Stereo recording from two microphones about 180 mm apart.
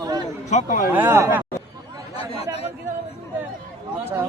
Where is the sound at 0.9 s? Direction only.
10° right (ahead or behind).